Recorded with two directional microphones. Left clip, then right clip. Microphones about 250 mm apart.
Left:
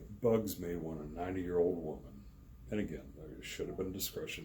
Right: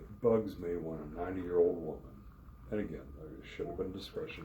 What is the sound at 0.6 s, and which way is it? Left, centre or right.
A man's voice, left.